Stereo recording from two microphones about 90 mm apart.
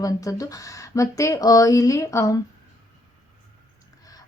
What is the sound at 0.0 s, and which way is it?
Speech, 40° left (ahead or behind).